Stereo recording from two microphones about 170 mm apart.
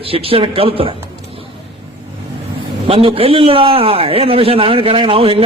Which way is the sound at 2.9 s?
35° right (ahead or behind).